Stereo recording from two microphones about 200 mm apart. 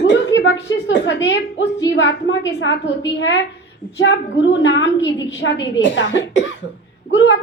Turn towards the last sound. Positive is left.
turn(degrees=65)  # may be behind; listen again after turning